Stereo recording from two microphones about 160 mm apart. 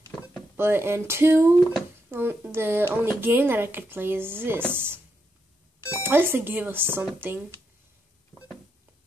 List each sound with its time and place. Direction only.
0.6 s speech: 15° right (ahead or behind)